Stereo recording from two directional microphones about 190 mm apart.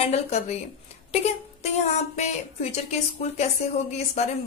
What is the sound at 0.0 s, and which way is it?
A woman's voice, 35° left (ahead or behind).